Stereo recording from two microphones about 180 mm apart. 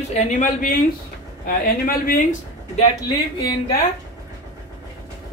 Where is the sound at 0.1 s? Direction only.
40° left (ahead or behind).